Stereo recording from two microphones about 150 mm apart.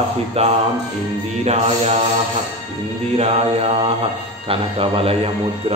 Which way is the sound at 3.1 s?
45° right (ahead or behind).